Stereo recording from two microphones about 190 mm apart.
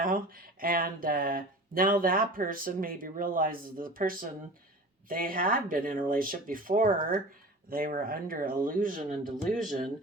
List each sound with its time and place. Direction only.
0.0 s speech: 50° right (ahead or behind)